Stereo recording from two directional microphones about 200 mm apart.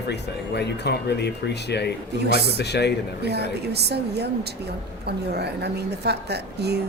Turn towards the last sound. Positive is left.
turn(degrees=-55)  # may be behind; listen again after turning